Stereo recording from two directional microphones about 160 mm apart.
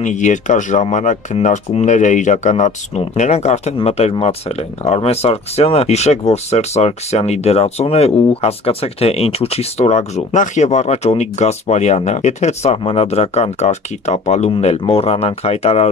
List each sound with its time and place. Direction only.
0.0 s speech: 50° left (ahead or behind)